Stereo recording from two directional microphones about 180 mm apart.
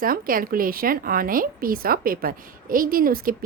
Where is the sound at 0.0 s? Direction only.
50° right (ahead or behind).